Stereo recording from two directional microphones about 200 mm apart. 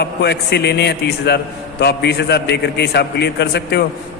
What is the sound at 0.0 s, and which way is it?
A man's voice, 55° left (ahead or behind).